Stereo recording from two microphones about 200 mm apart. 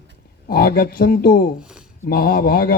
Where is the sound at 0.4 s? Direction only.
50° left (ahead or behind).